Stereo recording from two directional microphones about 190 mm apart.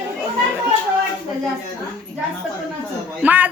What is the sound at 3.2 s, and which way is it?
Speech, 10° right (ahead or behind).